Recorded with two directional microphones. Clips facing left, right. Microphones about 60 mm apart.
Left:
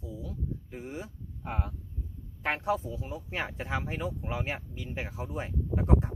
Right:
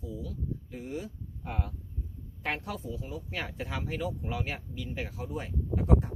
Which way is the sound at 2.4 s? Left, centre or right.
Left.